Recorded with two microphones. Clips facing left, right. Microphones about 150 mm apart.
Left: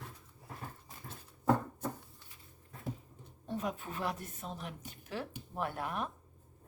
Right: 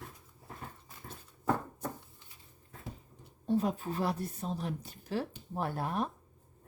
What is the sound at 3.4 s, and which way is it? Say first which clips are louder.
A woman's voice: right 7 dB; 35° right (ahead or behind).